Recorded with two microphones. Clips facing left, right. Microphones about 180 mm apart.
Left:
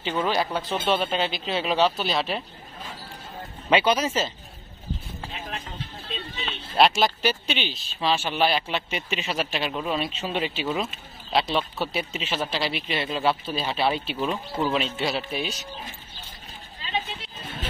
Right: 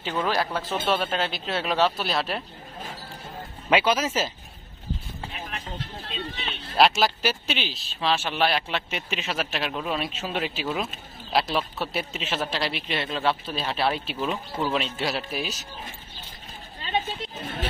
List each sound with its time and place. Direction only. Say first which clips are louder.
0.1 s speech: left 1 dB; centre (ahead or behind)
3.7 s speech: left 1 dB; 5° right (ahead or behind)
6.8 s speech: left 1 dB; centre (ahead or behind)